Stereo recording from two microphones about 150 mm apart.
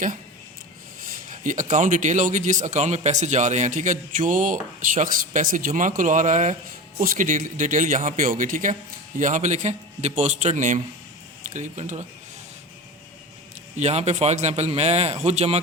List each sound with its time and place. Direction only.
1.1 s a man's voice: 60° right (ahead or behind)
13.7 s a man's voice: 50° right (ahead or behind)